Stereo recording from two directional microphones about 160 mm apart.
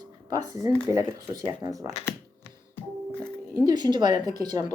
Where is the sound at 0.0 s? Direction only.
25° right (ahead or behind).